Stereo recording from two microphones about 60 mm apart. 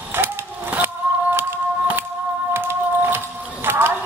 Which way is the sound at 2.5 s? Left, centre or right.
Right.